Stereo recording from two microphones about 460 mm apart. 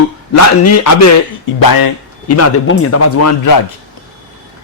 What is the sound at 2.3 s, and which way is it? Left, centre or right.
Speech, left.